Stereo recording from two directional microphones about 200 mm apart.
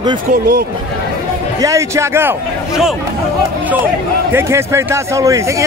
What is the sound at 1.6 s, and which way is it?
A man's voice, 15° right (ahead or behind).